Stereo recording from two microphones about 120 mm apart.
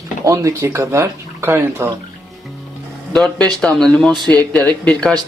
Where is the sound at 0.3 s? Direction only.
25° right (ahead or behind).